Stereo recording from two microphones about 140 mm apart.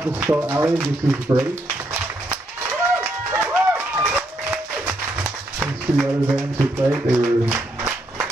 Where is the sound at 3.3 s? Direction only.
15° right (ahead or behind).